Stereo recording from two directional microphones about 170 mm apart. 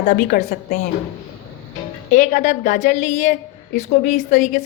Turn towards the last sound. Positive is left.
turn(degrees=45)  # may be behind; listen again after turning